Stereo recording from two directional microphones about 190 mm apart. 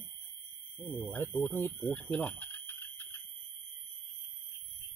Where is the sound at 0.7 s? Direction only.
5° left (ahead or behind).